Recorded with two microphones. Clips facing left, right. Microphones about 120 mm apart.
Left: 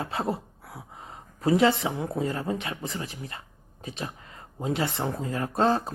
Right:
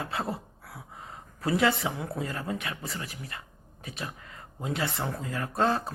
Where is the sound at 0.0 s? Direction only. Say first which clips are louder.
Left 3 dB; 25° left (ahead or behind).